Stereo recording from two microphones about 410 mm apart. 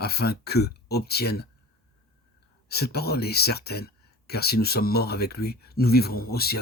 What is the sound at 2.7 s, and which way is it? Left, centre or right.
Speech, left.